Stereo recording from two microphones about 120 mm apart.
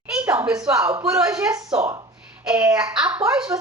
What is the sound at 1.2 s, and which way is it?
Speech, 25° right (ahead or behind).